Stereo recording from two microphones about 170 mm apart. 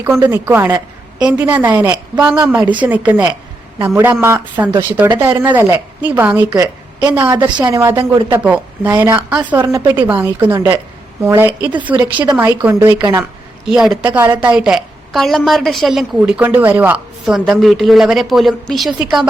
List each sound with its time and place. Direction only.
0.0 s a woman's voice: 15° right (ahead or behind)
6.5 s a woman's voice: 20° right (ahead or behind); by 19.3 s 5° right (ahead or behind)